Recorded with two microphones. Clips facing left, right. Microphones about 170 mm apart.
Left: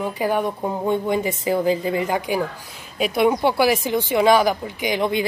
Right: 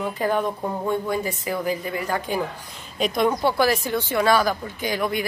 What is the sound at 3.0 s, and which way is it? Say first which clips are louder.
Speech: left 3 dB; 10° left (ahead or behind).